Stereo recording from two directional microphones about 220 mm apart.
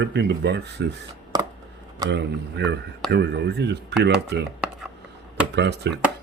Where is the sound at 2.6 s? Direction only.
50° right (ahead or behind).